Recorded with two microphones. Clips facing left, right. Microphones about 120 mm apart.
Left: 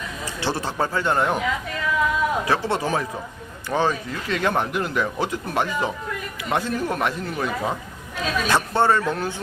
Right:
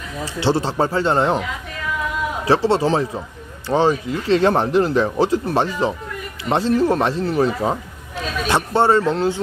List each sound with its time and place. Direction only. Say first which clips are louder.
0.3 s speech: right 6 dB; 25° right (ahead or behind)
2.5 s speech: right 6 dB; 30° right (ahead or behind)